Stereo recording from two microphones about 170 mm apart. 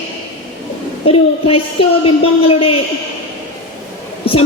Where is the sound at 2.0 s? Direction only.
35° left (ahead or behind).